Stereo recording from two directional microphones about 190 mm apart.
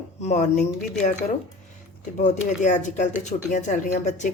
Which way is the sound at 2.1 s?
40° left (ahead or behind).